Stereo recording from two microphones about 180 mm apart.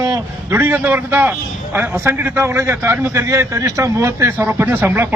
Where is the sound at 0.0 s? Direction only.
15° right (ahead or behind).